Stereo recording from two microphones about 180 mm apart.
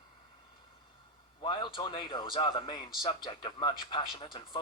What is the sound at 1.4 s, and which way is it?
Speech, 25° left (ahead or behind).